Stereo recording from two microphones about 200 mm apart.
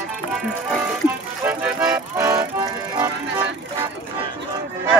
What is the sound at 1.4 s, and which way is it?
Music, 10° right (ahead or behind).